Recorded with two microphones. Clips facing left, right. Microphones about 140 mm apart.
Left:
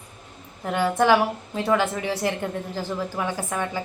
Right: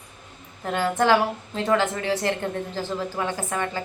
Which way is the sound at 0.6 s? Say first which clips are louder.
Left 1 dB; 10° left (ahead or behind).